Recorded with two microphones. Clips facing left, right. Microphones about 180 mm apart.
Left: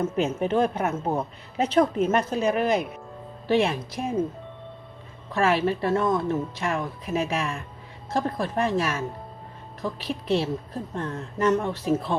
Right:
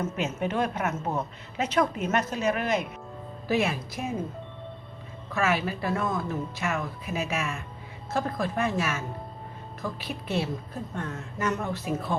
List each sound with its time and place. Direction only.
0.2 s a woman's voice: 35° left (ahead or behind)
5.3 s a woman's voice: 30° left (ahead or behind)